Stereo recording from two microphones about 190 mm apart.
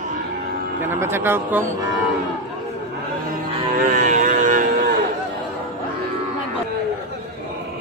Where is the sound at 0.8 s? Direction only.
15° right (ahead or behind).